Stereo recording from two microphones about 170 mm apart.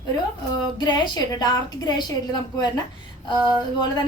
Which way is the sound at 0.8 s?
25° left (ahead or behind).